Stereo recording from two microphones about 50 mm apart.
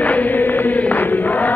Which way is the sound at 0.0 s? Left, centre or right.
Left.